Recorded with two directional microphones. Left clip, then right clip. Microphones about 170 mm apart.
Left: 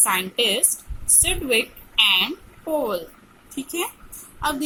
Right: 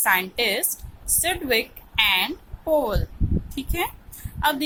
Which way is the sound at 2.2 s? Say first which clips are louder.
Left 1 dB; 25° right (ahead or behind).